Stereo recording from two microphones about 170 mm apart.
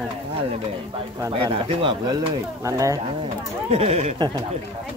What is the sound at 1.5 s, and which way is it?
Speech, 30° right (ahead or behind).